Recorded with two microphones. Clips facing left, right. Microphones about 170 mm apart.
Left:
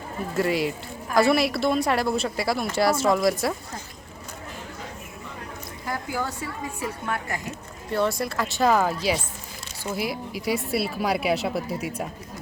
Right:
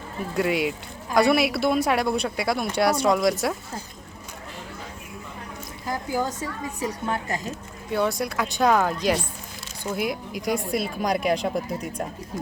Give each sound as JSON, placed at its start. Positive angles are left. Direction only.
{"t": 0.3, "sound": "a woman's voice", "side_deg": 0}
{"t": 5.8, "sound": "speech", "side_deg": -20}
{"t": 7.9, "sound": "a woman's voice", "side_deg": 0}